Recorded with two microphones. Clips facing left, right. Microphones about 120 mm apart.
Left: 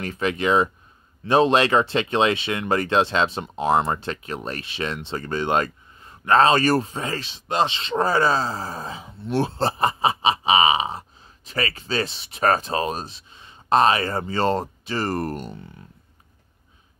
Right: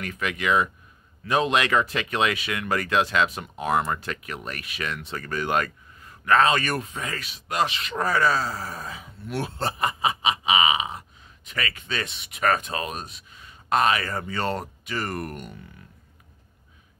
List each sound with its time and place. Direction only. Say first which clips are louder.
0.0 s speech: left 5 dB; 30° left (ahead or behind)